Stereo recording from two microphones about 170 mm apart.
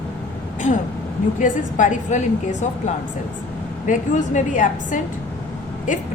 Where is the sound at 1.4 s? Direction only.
50° left (ahead or behind).